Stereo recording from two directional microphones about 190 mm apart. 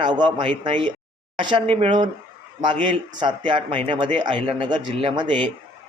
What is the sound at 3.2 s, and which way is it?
Speech, 25° right (ahead or behind).